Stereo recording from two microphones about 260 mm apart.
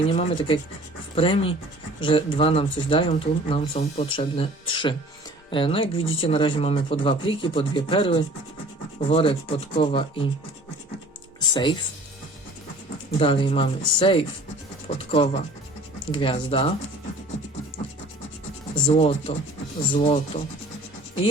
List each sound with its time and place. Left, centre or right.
0.1 s speech: left
11.3 s music: centre
13.1 s speech: centre
18.9 s speech: left